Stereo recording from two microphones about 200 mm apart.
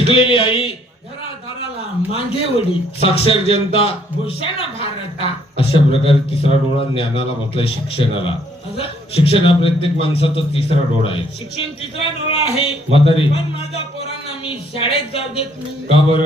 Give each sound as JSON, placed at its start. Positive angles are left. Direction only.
{"t": 0.0, "sound": "a man's voice", "side_deg": 30}
{"t": 2.1, "sound": "a man's voice", "side_deg": 30}